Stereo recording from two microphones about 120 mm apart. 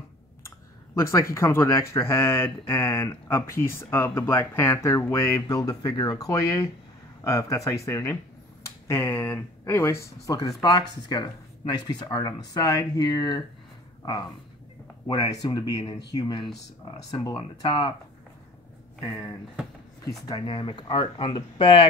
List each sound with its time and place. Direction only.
0.9 s speech: 25° left (ahead or behind)
15.0 s speech: 35° left (ahead or behind)
19.0 s speech: 30° left (ahead or behind)
20.4 s speech: 45° left (ahead or behind)